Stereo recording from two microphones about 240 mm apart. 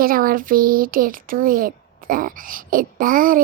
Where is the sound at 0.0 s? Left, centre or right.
Right.